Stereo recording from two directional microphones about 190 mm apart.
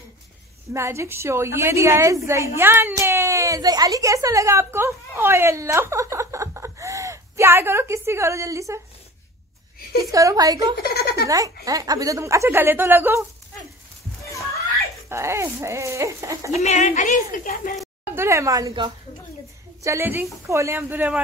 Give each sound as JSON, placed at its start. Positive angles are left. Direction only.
{"t": 0.7, "sound": "a woman's voice", "side_deg": -15}
{"t": 10.1, "sound": "a woman's voice", "side_deg": -20}
{"t": 10.8, "sound": "speech", "side_deg": 55}
{"t": 11.2, "sound": "a woman's voice", "side_deg": -20}
{"t": 15.0, "sound": "a woman's voice", "side_deg": -15}
{"t": 16.6, "sound": "a woman's voice", "side_deg": 40}
{"t": 18.1, "sound": "a woman's voice", "side_deg": -15}